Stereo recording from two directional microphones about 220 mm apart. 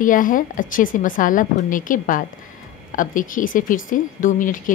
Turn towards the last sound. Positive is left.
turn(degrees=35)  # may be behind; listen again after turning